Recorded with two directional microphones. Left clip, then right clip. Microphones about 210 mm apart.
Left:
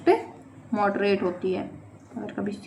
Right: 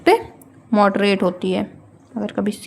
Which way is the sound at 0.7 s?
50° right (ahead or behind).